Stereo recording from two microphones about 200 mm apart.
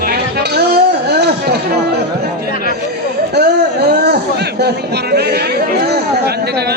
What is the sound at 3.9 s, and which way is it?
Speech, 55° right (ahead or behind).